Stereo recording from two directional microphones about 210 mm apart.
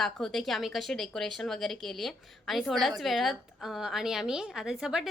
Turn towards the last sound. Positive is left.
turn(degrees=-5)  # may be behind; listen again after turning